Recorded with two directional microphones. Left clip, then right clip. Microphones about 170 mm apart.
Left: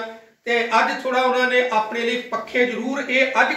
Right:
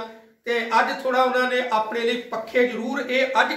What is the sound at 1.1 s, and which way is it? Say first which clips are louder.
Speech: even; centre (ahead or behind).